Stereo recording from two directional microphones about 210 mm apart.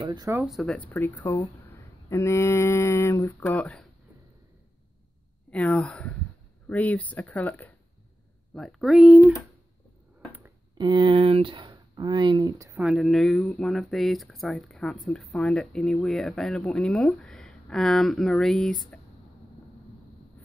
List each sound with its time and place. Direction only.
0.0 s speech: 20° right (ahead or behind)
0.5 s speech: centre (ahead or behind)
5.5 s speech: 5° left (ahead or behind)
10.8 s speech: 20° right (ahead or behind); by 18.8 s centre (ahead or behind)